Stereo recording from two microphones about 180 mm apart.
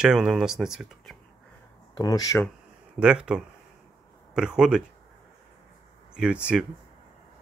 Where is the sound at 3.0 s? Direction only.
5° right (ahead or behind).